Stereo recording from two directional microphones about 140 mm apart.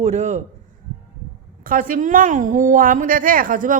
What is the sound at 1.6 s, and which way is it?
A woman's voice, 75° right (ahead or behind).